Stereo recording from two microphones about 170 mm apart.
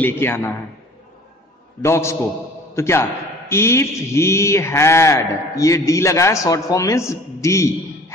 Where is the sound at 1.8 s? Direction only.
15° left (ahead or behind).